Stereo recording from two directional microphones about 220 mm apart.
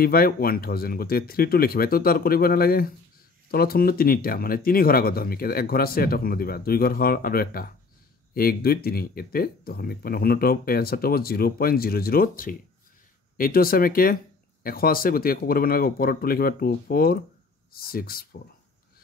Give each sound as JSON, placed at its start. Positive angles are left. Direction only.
{"t": 0.0, "sound": "speech", "side_deg": 40}